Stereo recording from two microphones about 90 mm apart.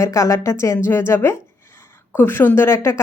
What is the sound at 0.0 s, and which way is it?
A woman's voice, 35° left (ahead or behind).